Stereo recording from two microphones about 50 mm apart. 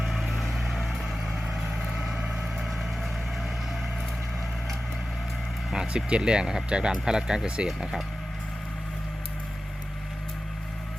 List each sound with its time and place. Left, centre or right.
0.1 s vehicle: centre
5.7 s speech: centre